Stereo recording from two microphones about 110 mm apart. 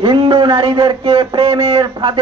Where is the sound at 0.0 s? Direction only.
50° right (ahead or behind).